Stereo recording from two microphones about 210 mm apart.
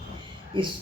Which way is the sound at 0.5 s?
20° right (ahead or behind).